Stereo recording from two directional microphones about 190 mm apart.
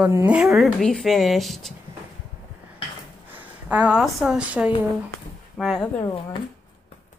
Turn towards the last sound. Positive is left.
turn(degrees=25)  # may be behind; listen again after turning